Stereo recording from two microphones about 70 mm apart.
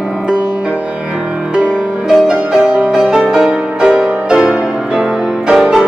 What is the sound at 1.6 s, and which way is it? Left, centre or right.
Music, centre.